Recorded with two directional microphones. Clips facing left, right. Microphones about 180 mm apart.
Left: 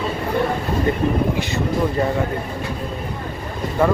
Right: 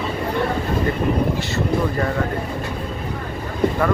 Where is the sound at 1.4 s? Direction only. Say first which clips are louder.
Even; 15° left (ahead or behind).